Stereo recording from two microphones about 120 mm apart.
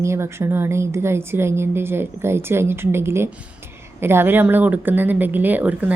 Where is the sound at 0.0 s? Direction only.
20° right (ahead or behind).